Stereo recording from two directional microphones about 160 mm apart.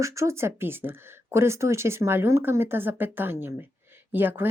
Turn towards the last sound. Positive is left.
turn(degrees=-10)  # may be behind; listen again after turning